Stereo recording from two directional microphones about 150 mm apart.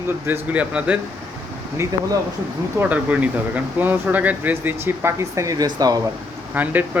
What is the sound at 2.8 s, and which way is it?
Speech, 10° right (ahead or behind).